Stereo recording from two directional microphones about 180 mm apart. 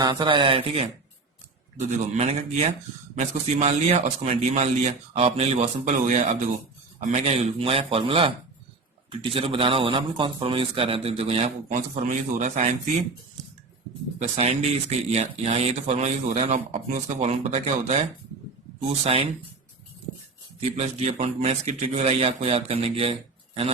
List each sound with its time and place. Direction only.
0.0 s speech: 25° right (ahead or behind)
1.9 s speech: 35° right (ahead or behind)
9.3 s speech: 30° right (ahead or behind)
14.2 s speech: 35° right (ahead or behind)
20.6 s speech: 35° right (ahead or behind)